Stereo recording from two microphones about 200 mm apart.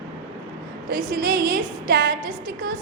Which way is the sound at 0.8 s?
45° right (ahead or behind).